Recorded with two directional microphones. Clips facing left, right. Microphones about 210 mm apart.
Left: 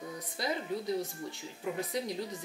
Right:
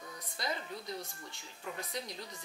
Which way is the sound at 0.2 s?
5° left (ahead or behind).